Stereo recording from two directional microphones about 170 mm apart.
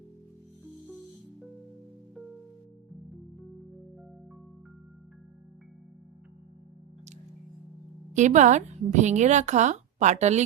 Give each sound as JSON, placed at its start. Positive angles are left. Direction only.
{"t": 8.1, "sound": "a woman's voice", "side_deg": -45}